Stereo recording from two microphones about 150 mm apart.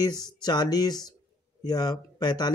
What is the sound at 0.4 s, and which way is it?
Speech, 25° left (ahead or behind).